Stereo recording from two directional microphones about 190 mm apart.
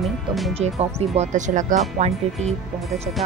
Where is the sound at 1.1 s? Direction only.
40° right (ahead or behind).